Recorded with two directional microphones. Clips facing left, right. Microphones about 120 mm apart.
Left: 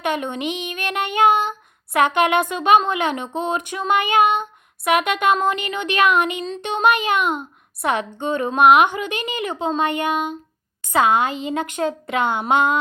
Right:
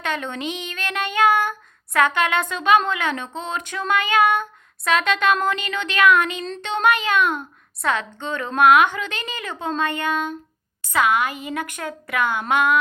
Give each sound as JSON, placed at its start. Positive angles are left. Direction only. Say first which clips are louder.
{"t": 0.0, "sound": "female singing", "louder": "left 3 dB", "side_deg": 15}
{"t": 6.6, "sound": "a woman's voice", "louder": "left 2 dB", "side_deg": 15}
{"t": 10.9, "sound": "female singing", "louder": "left 3 dB", "side_deg": 25}